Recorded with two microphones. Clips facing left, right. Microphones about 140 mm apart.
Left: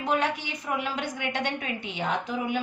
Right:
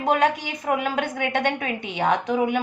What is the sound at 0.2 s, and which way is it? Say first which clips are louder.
A woman's voice: right 7 dB; 45° right (ahead or behind).